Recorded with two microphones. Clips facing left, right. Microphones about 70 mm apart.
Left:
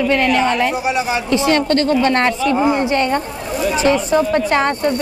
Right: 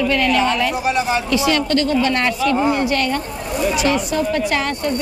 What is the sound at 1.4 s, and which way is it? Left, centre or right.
Speech, left.